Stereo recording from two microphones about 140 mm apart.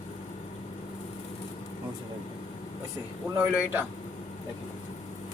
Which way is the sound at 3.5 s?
10° right (ahead or behind).